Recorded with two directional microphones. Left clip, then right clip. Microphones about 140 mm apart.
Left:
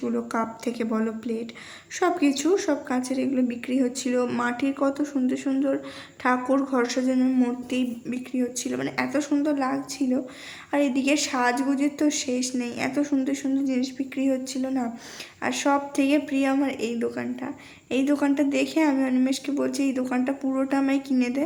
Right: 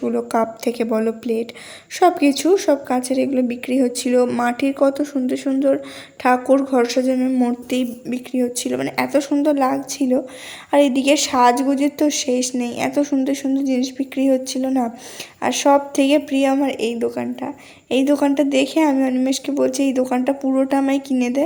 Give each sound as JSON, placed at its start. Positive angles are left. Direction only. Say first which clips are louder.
{"t": 0.0, "sound": "a woman's voice", "louder": "right 8 dB", "side_deg": -35}
{"t": 7.7, "sound": "a woman's voice", "louder": "right 6 dB", "side_deg": -45}